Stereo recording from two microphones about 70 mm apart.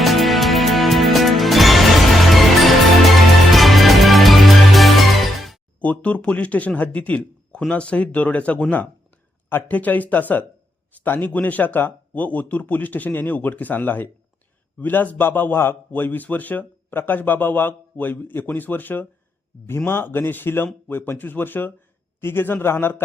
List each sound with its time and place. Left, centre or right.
0.0 s music: centre
5.8 s a man's voice: left